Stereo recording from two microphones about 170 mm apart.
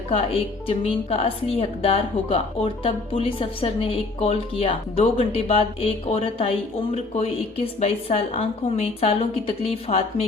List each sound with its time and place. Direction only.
0.1 s a woman's voice: 35° left (ahead or behind)
7.8 s a woman's voice: 35° left (ahead or behind)